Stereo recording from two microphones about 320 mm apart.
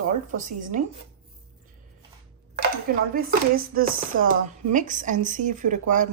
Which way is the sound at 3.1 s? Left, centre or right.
Right.